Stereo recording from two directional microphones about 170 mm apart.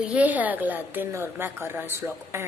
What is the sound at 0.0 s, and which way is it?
A woman's voice, 10° right (ahead or behind).